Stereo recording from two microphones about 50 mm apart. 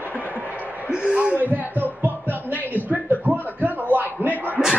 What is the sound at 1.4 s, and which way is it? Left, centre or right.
Music, right.